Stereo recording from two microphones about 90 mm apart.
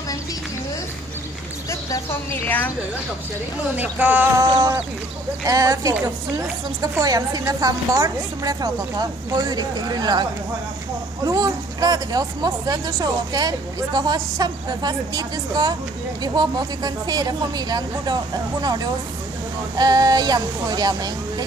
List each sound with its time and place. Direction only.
1.7 s speech: 30° left (ahead or behind)
3.7 s a sound: 20° right (ahead or behind)
4.4 s speech: 40° right (ahead or behind)
11.2 s speech: 45° right (ahead or behind)